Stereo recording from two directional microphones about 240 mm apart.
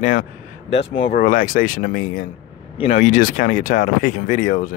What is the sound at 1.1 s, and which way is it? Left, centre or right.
Speech, left.